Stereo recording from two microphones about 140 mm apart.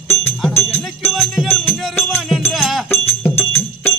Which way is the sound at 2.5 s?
Centre (ahead or behind).